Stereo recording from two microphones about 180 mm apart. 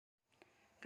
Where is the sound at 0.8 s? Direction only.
Centre (ahead or behind).